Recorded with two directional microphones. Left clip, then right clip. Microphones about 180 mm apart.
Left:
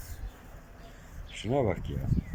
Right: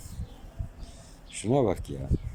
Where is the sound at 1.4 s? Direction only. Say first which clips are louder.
Right 3 dB; 20° right (ahead or behind).